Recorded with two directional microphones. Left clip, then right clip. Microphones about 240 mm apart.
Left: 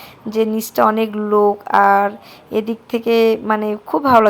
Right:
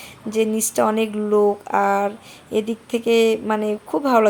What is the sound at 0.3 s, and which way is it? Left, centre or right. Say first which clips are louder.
Speech: left 2 dB; centre.